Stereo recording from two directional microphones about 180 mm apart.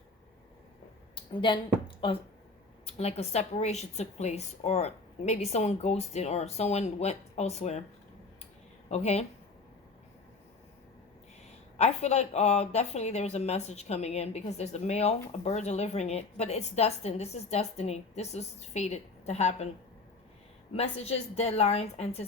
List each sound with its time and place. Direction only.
1.1 s a woman's voice: 25° left (ahead or behind)
8.9 s a woman's voice: 35° left (ahead or behind)
11.8 s a woman's voice: 40° left (ahead or behind)
20.7 s a woman's voice: 35° left (ahead or behind)